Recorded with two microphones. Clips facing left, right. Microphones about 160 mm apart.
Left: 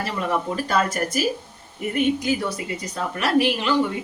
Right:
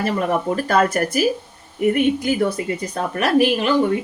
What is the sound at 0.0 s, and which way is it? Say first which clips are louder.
A woman's voice: right 5 dB; 50° right (ahead or behind).